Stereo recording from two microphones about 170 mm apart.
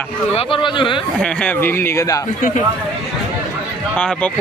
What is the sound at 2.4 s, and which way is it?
Speech, 50° left (ahead or behind).